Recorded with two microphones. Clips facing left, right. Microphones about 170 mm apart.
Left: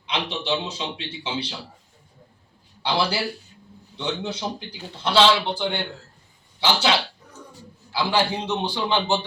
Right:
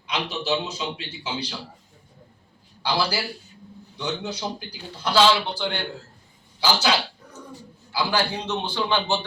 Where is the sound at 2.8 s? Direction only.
25° left (ahead or behind).